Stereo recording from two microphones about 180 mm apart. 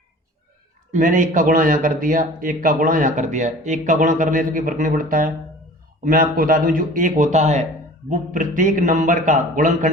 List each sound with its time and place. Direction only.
0.9 s a man's voice: 45° right (ahead or behind)
6.3 s a man's voice: 50° right (ahead or behind)